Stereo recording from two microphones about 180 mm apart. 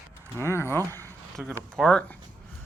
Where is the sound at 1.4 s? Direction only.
Centre (ahead or behind).